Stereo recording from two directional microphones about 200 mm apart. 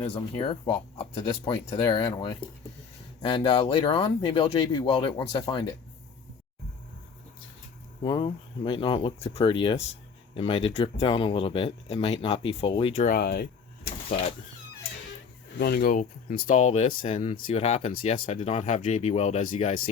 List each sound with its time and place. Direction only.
0.1 s speech: 25° left (ahead or behind)
8.0 s speech: 25° left (ahead or behind)
13.1 s door: 50° left (ahead or behind)
15.5 s speech: 50° left (ahead or behind)